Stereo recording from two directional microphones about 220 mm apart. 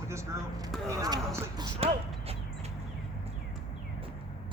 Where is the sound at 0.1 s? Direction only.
15° right (ahead or behind).